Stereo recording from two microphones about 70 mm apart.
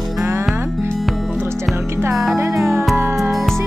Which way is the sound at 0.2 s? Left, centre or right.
Right.